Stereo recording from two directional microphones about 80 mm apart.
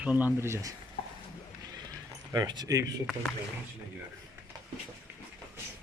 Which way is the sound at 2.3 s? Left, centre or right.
Right.